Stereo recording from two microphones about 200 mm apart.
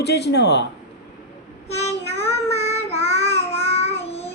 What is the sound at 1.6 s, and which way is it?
Child singing, 30° left (ahead or behind).